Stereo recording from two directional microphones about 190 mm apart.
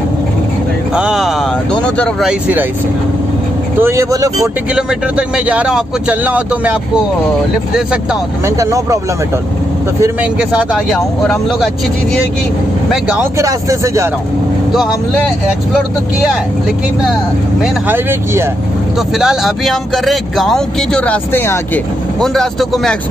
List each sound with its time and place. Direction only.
0.9 s speech: 5° right (ahead or behind)
3.8 s speech: 15° right (ahead or behind)
4.7 s speech: 5° right (ahead or behind)
7.7 s speech: 5° right (ahead or behind)
8.5 s speech: 15° right (ahead or behind)
10.0 s speech: 5° right (ahead or behind)
12.9 s speech: 15° right (ahead or behind)
17.8 s speech: 10° right (ahead or behind)
19.1 s speech: centre (ahead or behind)